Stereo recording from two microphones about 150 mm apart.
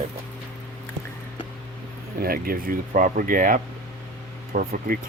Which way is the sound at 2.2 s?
80° right.